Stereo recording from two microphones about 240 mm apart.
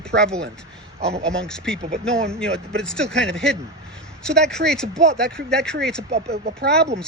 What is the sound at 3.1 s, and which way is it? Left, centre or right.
Speech, right.